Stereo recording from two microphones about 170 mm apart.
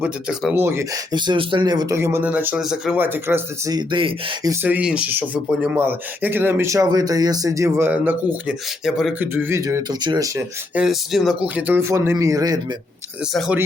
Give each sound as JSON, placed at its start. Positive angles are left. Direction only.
{"t": 0.0, "sound": "speech", "side_deg": -5}
{"t": 0.5, "sound": "speech", "side_deg": -15}
{"t": 1.1, "sound": "speech", "side_deg": -25}
{"t": 4.6, "sound": "speech", "side_deg": -10}
{"t": 9.2, "sound": "speech", "side_deg": -15}
{"t": 10.8, "sound": "speech", "side_deg": 0}
{"t": 13.3, "sound": "speech", "side_deg": 0}